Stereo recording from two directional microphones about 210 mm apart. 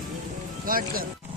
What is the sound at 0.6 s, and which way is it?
Speech, 40° right (ahead or behind).